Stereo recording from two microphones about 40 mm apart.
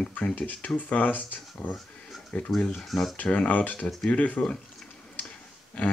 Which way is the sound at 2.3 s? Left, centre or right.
Left.